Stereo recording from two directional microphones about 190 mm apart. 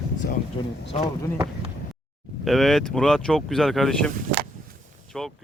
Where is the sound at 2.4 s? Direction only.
Centre (ahead or behind).